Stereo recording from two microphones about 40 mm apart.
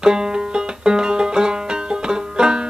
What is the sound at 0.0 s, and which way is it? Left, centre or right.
Banjo, centre.